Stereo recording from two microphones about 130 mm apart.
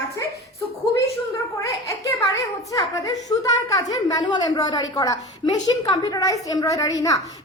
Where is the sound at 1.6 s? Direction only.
25° left (ahead or behind).